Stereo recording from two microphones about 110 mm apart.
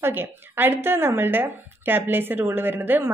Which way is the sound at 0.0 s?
20° right (ahead or behind).